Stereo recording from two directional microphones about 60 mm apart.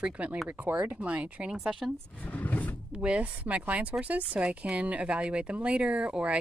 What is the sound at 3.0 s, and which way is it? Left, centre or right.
Speech, right.